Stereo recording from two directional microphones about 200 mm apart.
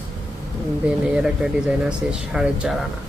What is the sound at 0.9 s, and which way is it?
Speech, 5° right (ahead or behind).